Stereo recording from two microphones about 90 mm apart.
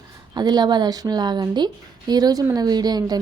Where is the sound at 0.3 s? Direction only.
50° right (ahead or behind).